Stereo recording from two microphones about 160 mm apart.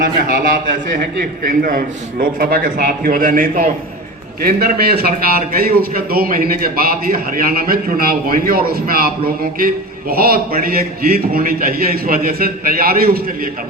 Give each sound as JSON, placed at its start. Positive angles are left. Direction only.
{"t": 0.0, "sound": "a man's voice", "side_deg": -60}
{"t": 4.4, "sound": "a man's voice", "side_deg": -75}